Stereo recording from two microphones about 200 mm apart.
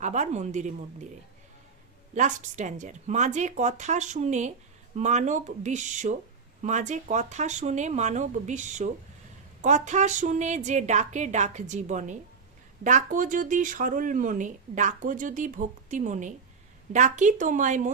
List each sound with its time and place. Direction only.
0.0 s speech: 35° right (ahead or behind)
2.1 s speech: 40° right (ahead or behind)